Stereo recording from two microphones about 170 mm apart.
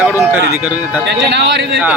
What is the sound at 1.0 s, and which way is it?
Speech, 90° right.